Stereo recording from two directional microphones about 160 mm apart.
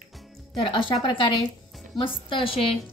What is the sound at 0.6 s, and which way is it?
Speech, 35° left (ahead or behind).